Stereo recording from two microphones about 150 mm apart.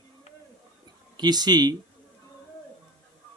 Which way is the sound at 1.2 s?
30° right (ahead or behind).